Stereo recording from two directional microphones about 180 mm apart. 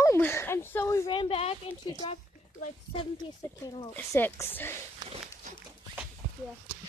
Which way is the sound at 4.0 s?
10° left (ahead or behind).